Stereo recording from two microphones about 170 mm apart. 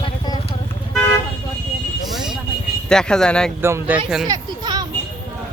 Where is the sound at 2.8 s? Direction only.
5° left (ahead or behind).